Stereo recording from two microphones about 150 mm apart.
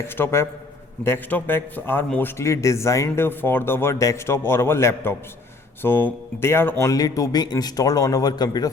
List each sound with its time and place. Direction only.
0.0 s speech: 15° left (ahead or behind)